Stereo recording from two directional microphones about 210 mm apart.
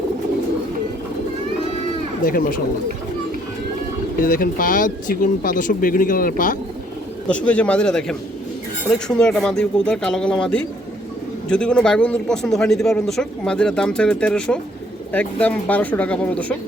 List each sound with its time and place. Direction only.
2.2 s speech: 40° left (ahead or behind)
4.2 s speech: 40° left (ahead or behind)
7.3 s a man's voice: 5° left (ahead or behind)